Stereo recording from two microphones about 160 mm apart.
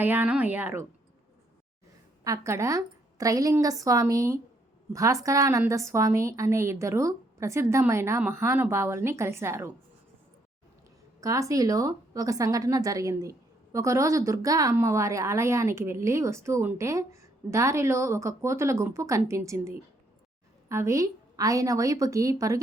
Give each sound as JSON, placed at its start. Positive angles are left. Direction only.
{"t": 0.0, "sound": "a woman's voice", "side_deg": -10}
{"t": 2.2, "sound": "a woman's voice", "side_deg": -20}
{"t": 11.2, "sound": "a woman's voice", "side_deg": -20}